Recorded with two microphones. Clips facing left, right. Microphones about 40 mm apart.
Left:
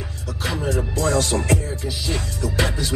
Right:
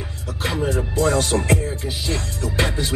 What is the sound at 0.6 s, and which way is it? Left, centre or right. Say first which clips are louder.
Music: right 2 dB; centre.